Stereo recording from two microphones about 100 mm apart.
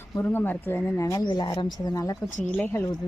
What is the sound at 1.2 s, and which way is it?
Speech, 45° left (ahead or behind).